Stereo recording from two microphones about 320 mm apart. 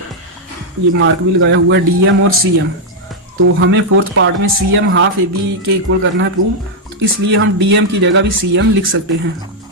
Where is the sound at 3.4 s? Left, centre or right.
Right.